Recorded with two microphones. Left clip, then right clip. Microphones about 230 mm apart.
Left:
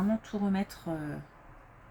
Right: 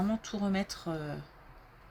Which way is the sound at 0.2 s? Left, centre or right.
Right.